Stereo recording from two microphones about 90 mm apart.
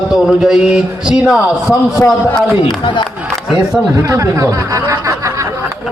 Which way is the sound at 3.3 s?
5° right (ahead or behind).